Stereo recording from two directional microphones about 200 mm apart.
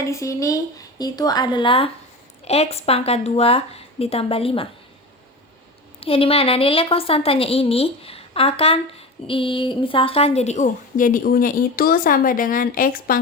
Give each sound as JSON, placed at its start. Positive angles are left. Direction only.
{"t": 0.0, "sound": "a woman's voice", "side_deg": 15}
{"t": 6.0, "sound": "a woman's voice", "side_deg": 30}